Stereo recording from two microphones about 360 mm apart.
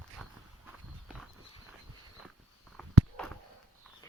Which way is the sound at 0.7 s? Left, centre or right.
Centre.